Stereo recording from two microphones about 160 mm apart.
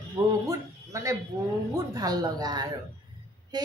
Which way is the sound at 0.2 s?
25° right (ahead or behind).